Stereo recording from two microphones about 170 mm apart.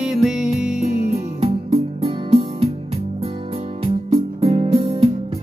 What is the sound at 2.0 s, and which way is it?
Music, 35° right (ahead or behind).